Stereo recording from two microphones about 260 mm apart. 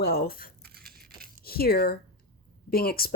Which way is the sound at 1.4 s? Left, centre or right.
Left.